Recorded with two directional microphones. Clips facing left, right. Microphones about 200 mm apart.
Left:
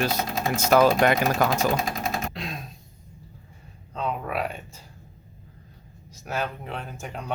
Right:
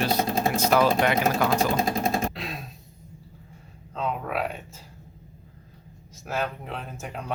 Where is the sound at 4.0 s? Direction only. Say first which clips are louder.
Even; centre (ahead or behind).